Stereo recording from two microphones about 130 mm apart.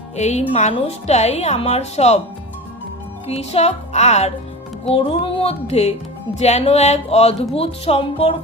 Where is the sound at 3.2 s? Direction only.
50° left (ahead or behind).